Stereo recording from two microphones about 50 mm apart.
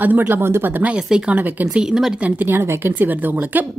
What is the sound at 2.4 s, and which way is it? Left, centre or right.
Speech, right.